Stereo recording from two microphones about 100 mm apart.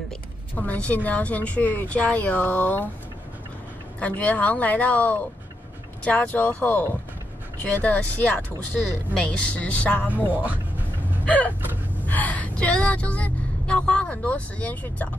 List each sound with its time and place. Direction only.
0.6 s speech: 15° left (ahead or behind)
4.0 s speech: 15° left (ahead or behind)
10.1 s speech: 15° right (ahead or behind)
11.2 s speech: 15° left (ahead or behind)